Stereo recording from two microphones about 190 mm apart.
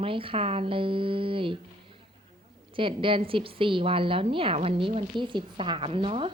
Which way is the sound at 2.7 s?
25° right (ahead or behind).